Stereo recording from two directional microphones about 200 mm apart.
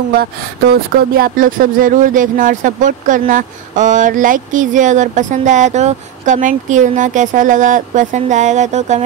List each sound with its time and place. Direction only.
0.2 s speech: 50° right (ahead or behind)